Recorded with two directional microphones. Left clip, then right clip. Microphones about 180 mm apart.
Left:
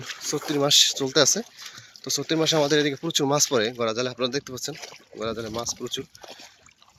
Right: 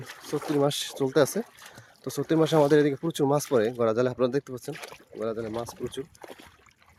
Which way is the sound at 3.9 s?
30° right (ahead or behind).